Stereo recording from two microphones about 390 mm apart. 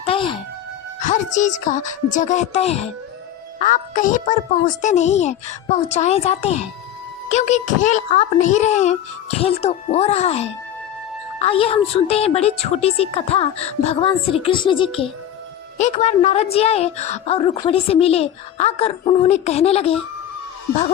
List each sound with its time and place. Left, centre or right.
0.0 s music: centre
1.0 s a woman's voice: centre